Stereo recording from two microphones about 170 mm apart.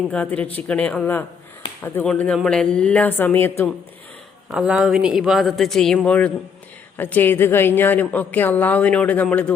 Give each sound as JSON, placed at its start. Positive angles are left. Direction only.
{"t": 0.1, "sound": "a woman's voice", "side_deg": 10}
{"t": 4.4, "sound": "a man's voice", "side_deg": -5}